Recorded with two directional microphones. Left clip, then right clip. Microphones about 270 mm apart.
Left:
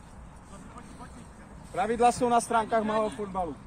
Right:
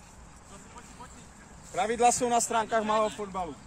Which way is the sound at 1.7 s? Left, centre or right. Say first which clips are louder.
Even; right.